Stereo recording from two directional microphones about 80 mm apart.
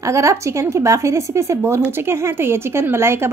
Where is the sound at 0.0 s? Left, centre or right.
Right.